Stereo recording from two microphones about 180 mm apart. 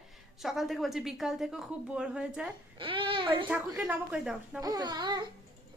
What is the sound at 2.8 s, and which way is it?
Speech, 30° right (ahead or behind).